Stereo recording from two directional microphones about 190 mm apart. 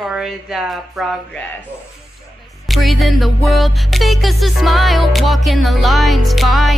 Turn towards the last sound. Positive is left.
turn(degrees=0)  # may be behind; listen again after turning